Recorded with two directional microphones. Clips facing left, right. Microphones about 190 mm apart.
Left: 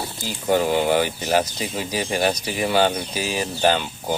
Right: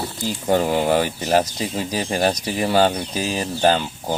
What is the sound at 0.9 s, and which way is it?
Speech, 35° right (ahead or behind).